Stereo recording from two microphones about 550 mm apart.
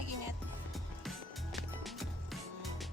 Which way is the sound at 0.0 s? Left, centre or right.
Right.